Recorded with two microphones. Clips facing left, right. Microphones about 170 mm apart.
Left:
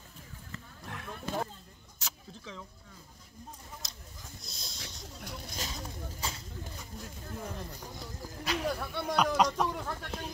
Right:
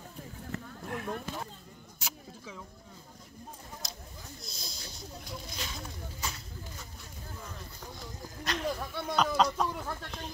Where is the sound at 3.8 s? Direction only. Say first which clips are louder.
Right 5 dB; centre (ahead or behind).